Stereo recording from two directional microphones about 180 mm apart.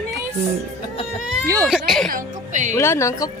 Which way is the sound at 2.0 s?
45° right (ahead or behind).